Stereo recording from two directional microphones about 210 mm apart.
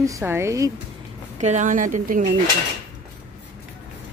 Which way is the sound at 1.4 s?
35° right (ahead or behind).